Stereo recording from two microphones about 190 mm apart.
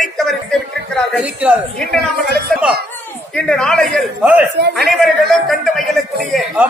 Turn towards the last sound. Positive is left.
turn(degrees=0)  # may be behind; listen again after turning